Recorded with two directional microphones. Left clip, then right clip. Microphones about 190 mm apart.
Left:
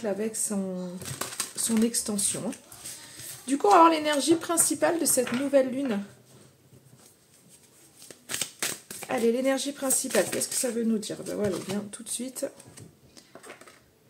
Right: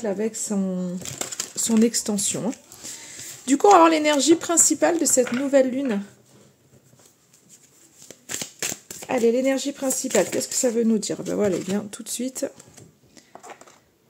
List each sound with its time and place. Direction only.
0.0 s speech: 30° right (ahead or behind)
3.7 s speech: 35° right (ahead or behind)
8.3 s shuffling cards: 10° right (ahead or behind)
9.0 s speech: 30° right (ahead or behind)